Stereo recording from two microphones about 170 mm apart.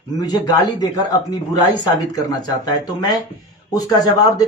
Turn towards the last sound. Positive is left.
turn(degrees=20)  # may be behind; listen again after turning